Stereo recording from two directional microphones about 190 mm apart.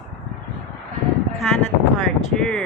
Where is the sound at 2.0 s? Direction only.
5° left (ahead or behind).